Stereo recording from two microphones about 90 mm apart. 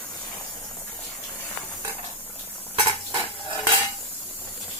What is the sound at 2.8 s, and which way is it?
Stir, 60° right (ahead or behind).